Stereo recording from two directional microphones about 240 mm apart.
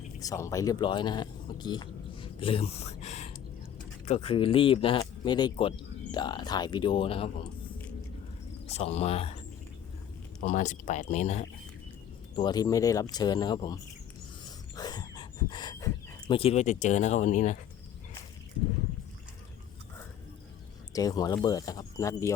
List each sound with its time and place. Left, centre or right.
0.2 s speech: centre
8.6 s speech: left
10.4 s speech: left
12.4 s speech: centre
14.8 s dog: centre
16.3 s speech: left
20.9 s speech: centre